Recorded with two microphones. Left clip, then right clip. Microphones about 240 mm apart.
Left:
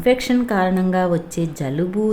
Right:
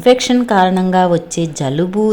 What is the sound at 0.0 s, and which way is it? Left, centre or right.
Speech, centre.